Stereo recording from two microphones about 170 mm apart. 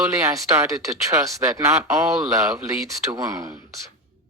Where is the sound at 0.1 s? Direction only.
20° right (ahead or behind).